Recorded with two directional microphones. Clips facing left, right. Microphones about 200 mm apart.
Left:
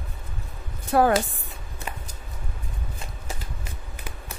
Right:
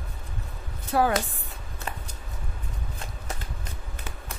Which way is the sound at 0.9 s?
55° left (ahead or behind).